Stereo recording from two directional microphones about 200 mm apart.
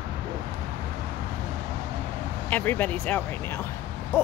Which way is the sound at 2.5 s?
10° left (ahead or behind).